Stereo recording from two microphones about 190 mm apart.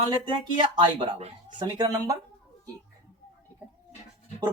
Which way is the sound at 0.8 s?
25° right (ahead or behind).